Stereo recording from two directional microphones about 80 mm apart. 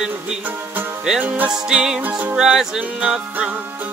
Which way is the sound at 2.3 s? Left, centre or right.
Centre.